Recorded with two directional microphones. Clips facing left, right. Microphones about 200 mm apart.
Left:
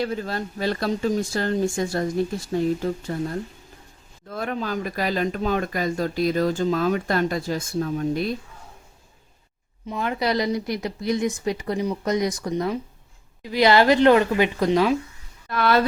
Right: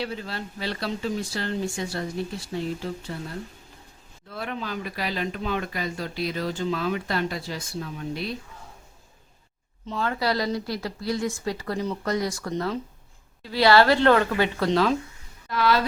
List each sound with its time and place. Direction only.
0.0 s speech: 45° left (ahead or behind)
9.8 s speech: 15° left (ahead or behind)
15.4 s speech: 55° left (ahead or behind)